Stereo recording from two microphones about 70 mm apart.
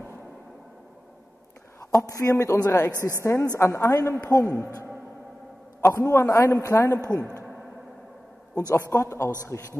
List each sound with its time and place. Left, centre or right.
2.0 s a man's voice: left
2.9 s a woman's voice: right
3.5 s a man's voice: left
4.6 s a woman's voice: right
5.8 s a man's voice: left
7.0 s a woman's voice: right
8.5 s a man's voice: left